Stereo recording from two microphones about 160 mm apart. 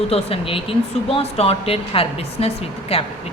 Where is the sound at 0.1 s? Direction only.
35° left (ahead or behind).